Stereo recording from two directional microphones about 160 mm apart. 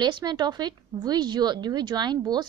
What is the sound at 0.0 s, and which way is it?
A woman's voice, 30° right (ahead or behind).